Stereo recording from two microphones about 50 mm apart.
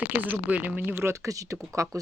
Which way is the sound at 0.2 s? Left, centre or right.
Right.